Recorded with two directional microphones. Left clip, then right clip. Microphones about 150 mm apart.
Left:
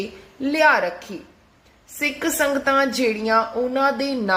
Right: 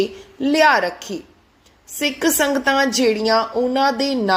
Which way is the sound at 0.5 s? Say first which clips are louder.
Right 2 dB; 20° right (ahead or behind).